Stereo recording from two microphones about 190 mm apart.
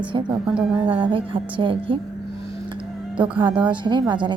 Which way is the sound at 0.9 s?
25° right (ahead or behind).